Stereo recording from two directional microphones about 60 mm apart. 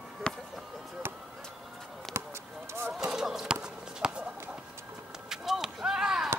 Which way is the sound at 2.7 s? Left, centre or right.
Right.